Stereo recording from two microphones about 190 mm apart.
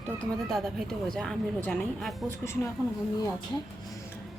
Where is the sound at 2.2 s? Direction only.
15° left (ahead or behind).